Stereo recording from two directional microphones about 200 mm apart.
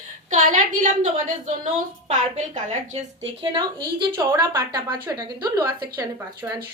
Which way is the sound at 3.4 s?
25° right (ahead or behind).